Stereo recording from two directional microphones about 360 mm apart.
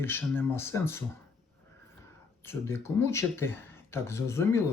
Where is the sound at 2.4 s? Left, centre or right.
Centre.